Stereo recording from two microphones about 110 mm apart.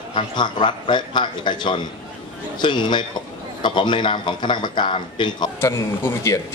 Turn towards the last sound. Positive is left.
turn(degrees=25)  # may be behind; listen again after turning